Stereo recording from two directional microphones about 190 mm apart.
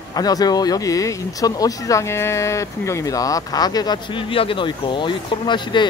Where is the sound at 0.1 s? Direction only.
20° left (ahead or behind).